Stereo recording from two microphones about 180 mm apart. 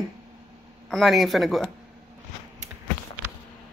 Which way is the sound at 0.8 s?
Centre (ahead or behind).